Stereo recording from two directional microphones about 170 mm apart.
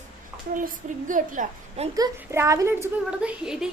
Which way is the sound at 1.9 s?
20° right (ahead or behind).